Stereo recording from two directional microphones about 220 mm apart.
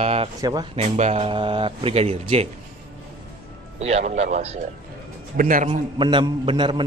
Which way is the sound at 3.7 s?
30° right (ahead or behind).